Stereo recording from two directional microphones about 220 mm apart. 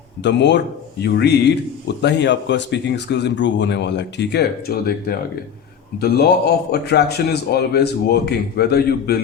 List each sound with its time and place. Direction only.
0.2 s a man's voice: 50° left (ahead or behind)